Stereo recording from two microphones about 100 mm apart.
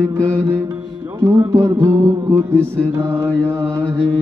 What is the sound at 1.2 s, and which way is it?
Music, 35° right (ahead or behind).